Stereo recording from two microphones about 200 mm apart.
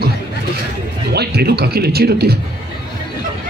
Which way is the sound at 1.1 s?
55° right (ahead or behind).